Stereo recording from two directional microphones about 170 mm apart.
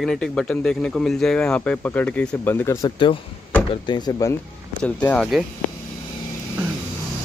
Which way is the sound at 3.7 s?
25° left (ahead or behind).